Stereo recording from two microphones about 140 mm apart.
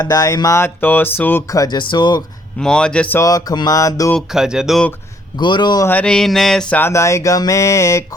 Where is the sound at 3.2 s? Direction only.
25° left (ahead or behind).